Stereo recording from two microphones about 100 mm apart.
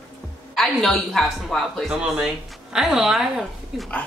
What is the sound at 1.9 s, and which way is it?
A man's voice, 5° right (ahead or behind).